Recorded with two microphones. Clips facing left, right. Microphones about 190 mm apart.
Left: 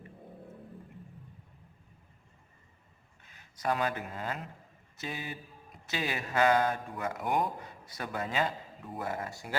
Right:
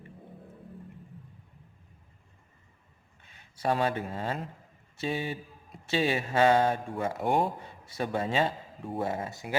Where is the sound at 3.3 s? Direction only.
30° right (ahead or behind).